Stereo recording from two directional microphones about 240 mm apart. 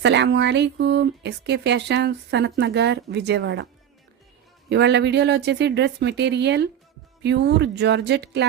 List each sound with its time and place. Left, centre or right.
0.0 s speech: right
4.7 s speech: right